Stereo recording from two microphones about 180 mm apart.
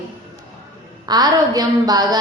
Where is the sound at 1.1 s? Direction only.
20° right (ahead or behind).